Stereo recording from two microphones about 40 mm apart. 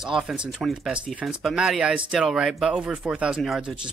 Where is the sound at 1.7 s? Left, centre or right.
Centre.